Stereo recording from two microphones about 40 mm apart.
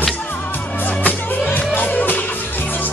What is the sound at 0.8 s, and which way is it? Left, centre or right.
Music, left.